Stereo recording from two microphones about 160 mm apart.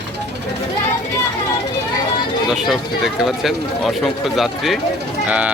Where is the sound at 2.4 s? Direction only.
Centre (ahead or behind).